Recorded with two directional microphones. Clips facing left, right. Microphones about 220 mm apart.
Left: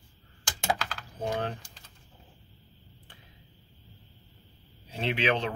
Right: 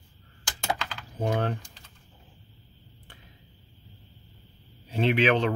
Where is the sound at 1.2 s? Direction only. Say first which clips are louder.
Right 4 dB; 60° right (ahead or behind).